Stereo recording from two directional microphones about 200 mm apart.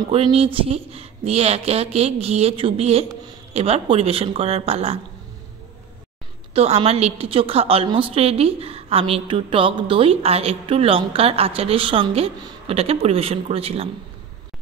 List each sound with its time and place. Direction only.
0.1 s speech: 30° right (ahead or behind)
6.5 s a woman's voice: 30° right (ahead or behind)